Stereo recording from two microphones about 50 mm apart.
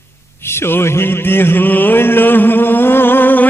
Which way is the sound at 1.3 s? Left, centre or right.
Left.